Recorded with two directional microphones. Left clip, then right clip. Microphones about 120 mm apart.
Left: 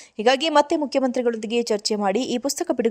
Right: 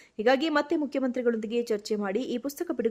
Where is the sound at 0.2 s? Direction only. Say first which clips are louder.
Left 6 dB; 30° left (ahead or behind).